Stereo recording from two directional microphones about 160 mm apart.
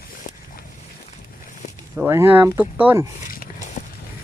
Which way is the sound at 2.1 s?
15° right (ahead or behind).